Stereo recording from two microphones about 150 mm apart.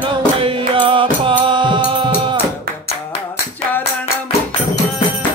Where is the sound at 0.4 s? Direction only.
35° right (ahead or behind).